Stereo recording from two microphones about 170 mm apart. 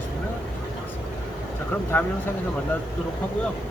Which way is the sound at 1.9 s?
10° left (ahead or behind).